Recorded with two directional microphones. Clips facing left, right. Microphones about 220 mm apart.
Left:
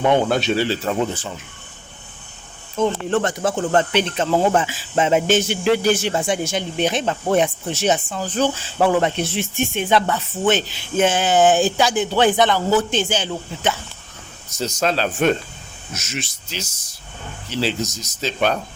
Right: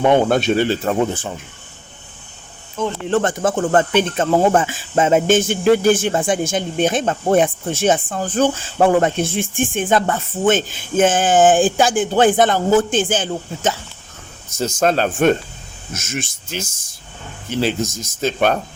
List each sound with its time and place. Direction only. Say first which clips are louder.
0.0 s speech: right 3 dB; 50° right (ahead or behind)
3.1 s speech: right 2 dB; 45° right (ahead or behind)